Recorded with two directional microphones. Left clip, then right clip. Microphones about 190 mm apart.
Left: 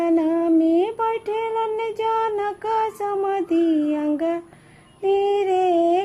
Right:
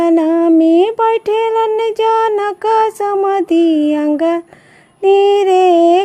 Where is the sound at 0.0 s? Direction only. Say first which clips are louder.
Right 8 dB; 45° right (ahead or behind).